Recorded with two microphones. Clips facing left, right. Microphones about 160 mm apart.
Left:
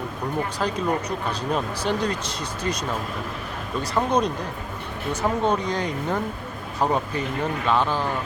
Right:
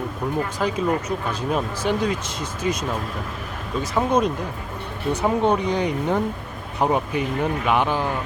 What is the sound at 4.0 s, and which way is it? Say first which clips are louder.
Speech: right 2 dB; 5° right (ahead or behind).